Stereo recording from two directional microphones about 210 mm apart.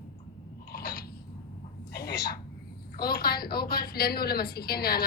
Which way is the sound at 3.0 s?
45° left (ahead or behind).